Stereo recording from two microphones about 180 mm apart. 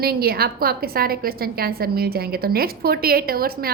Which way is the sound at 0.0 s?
60° right (ahead or behind).